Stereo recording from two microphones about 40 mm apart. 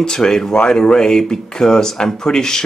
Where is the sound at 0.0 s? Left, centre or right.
Centre.